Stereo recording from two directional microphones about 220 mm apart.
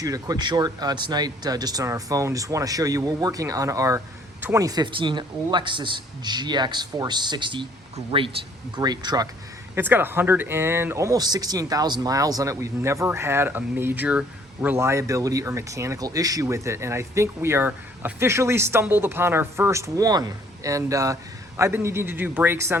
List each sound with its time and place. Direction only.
0.0 s speech: 15° right (ahead or behind)